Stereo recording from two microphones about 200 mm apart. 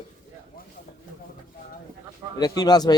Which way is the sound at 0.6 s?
45° left (ahead or behind).